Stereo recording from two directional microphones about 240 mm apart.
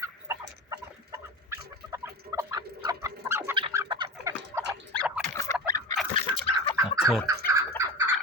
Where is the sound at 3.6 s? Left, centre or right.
Centre.